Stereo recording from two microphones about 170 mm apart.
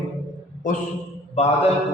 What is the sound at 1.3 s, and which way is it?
Mantra, 35° left (ahead or behind).